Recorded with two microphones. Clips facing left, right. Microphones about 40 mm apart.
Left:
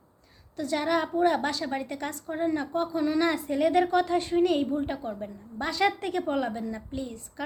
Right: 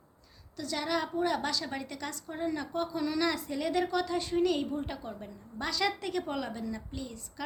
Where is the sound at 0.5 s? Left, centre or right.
Left.